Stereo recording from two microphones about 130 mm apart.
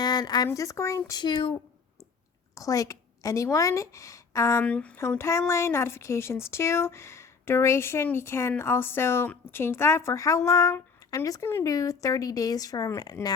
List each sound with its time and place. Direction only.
0.0 s a sound: 30° left (ahead or behind)
0.4 s speech: 25° left (ahead or behind)
1.2 s speech: 35° left (ahead or behind)
2.6 s a woman's voice: 25° left (ahead or behind)
4.6 s speech: 10° left (ahead or behind); by 13.3 s 30° left (ahead or behind)